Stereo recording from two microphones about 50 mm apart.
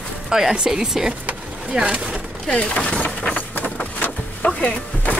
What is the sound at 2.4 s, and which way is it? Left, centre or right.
Speech, left.